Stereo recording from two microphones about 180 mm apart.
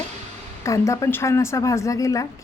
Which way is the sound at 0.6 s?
15° left (ahead or behind).